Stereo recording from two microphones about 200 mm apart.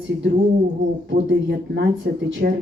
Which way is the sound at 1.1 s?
65° right (ahead or behind).